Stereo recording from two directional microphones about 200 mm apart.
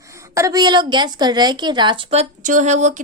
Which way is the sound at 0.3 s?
15° right (ahead or behind).